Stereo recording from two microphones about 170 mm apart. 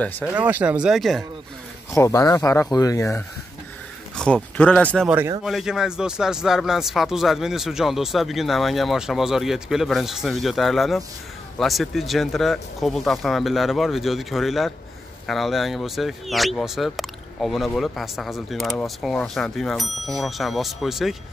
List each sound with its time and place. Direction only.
0.3 s speech: 10° right (ahead or behind)
1.9 s speech: 20° left (ahead or behind)
4.2 s speech: 5° left (ahead or behind)
5.0 s speech: 10° right (ahead or behind)